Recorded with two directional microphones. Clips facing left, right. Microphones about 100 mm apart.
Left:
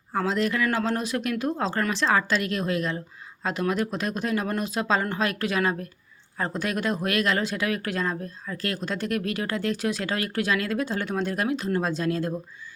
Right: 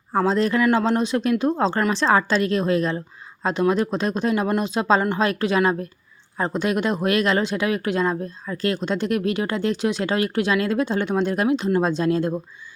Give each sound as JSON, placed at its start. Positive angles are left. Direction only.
{"t": 0.1, "sound": "speech", "side_deg": -35}